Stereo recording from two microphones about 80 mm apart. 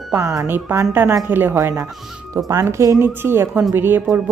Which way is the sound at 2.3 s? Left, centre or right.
Right.